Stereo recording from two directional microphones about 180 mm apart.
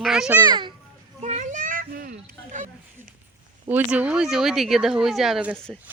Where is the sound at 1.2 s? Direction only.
40° right (ahead or behind).